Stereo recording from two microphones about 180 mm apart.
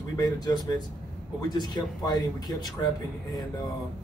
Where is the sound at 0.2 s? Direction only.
20° left (ahead or behind).